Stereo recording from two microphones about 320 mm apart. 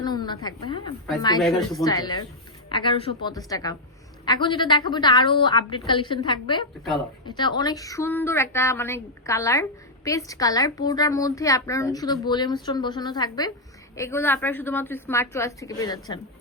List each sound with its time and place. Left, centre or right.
0.0 s a woman's voice: centre